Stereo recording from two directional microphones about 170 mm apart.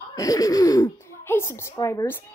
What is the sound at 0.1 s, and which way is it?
A woman's voice, 20° left (ahead or behind).